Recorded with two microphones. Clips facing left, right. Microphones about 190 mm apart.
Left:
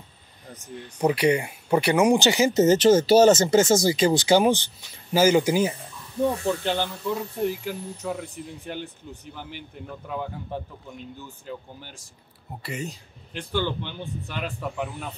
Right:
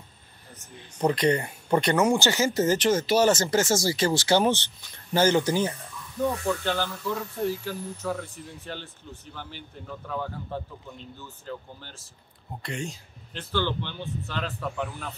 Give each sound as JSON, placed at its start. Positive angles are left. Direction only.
{"t": 0.9, "sound": "speech", "side_deg": 10}
{"t": 6.2, "sound": "speech", "side_deg": 25}